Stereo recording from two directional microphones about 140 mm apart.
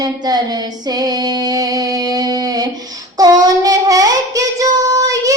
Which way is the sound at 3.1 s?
25° right (ahead or behind).